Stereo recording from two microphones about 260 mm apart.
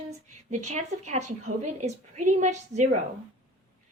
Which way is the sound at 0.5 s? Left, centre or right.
Right.